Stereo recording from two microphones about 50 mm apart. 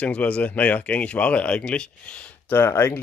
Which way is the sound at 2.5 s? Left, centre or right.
Left.